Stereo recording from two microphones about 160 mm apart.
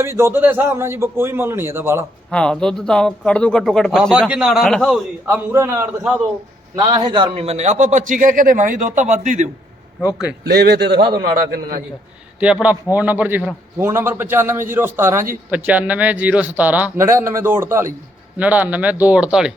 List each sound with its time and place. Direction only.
0.0 s speech: 15° right (ahead or behind)
2.3 s a man's voice: 5° left (ahead or behind)
5.2 s speech: 15° right (ahead or behind)
6.7 s a man's voice: 25° right (ahead or behind); by 9.5 s 50° right (ahead or behind)
10.4 s a man's voice: 90° right
11.1 s a man's voice: 70° right (ahead or behind)
12.4 s speech: 5° right (ahead or behind)